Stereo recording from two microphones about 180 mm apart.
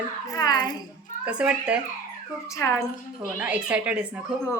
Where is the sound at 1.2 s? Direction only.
5° right (ahead or behind).